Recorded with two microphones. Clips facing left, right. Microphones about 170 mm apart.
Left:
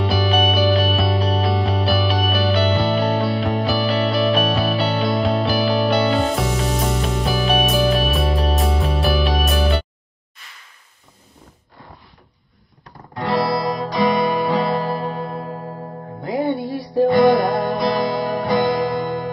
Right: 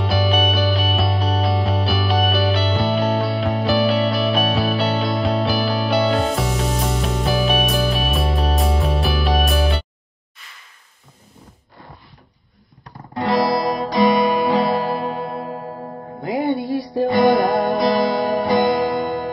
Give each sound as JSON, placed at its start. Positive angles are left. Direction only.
{"t": 0.0, "sound": "music", "side_deg": 0}
{"t": 13.4, "sound": "music", "side_deg": -15}
{"t": 16.4, "sound": "music", "side_deg": 0}
{"t": 17.6, "sound": "music", "side_deg": -15}